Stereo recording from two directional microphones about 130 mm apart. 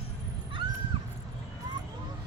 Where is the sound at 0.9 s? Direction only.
40° right (ahead or behind).